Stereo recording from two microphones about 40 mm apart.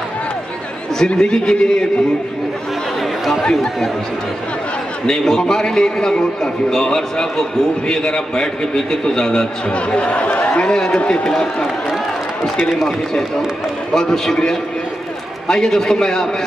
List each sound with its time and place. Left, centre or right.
0.9 s a man's voice: centre
5.0 s a man's voice: centre
13.9 s a man's voice: centre